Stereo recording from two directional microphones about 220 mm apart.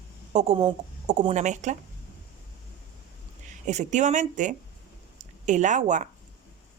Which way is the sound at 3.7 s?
30° right (ahead or behind).